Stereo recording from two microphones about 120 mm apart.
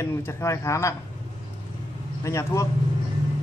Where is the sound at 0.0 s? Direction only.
20° left (ahead or behind).